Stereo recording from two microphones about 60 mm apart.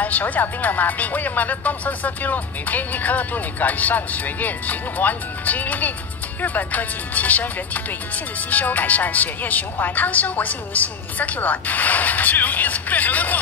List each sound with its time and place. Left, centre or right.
0.0 s speech: left